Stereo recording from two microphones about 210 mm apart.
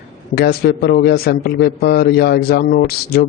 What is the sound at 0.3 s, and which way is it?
A man's voice, 50° left (ahead or behind).